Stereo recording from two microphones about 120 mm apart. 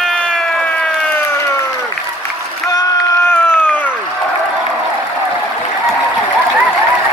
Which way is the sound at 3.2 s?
20° left (ahead or behind).